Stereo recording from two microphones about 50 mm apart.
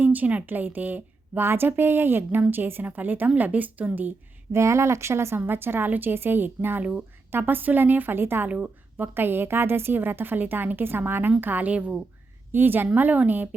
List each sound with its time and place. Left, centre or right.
0.0 s a woman's voice: right
4.5 s speech: right
5.5 s a woman's voice: right
8.4 s a woman's voice: right
9.0 s a woman's voice: right
12.5 s a woman's voice: right